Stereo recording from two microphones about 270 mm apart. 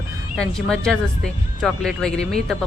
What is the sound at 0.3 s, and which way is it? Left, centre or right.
Speech, centre.